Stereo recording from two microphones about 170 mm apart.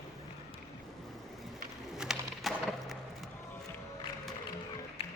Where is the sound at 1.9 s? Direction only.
5° right (ahead or behind).